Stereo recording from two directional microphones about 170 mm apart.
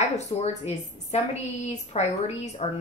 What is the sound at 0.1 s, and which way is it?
A woman's voice, 40° left (ahead or behind).